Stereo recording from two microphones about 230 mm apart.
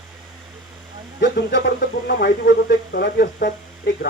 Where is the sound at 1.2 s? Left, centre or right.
Left.